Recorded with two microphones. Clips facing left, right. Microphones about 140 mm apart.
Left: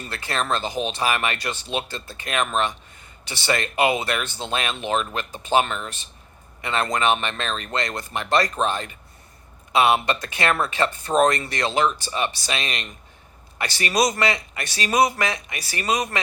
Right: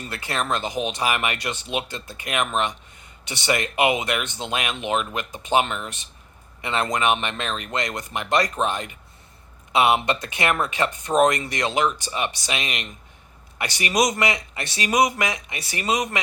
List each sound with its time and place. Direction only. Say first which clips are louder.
0.1 s speech: left 1 dB; 20° right (ahead or behind)